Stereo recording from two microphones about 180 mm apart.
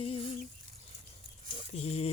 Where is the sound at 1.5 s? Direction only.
35° left (ahead or behind).